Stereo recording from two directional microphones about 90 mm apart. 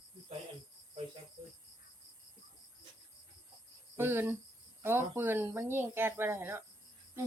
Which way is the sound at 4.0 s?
25° right (ahead or behind).